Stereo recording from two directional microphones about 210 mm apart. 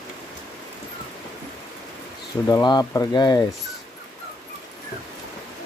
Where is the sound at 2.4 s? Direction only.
20° left (ahead or behind).